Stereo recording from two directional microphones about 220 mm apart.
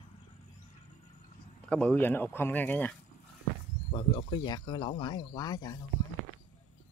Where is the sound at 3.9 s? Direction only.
20° left (ahead or behind).